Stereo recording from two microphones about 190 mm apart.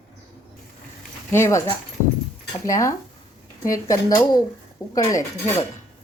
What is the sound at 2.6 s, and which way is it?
Speech, 15° left (ahead or behind).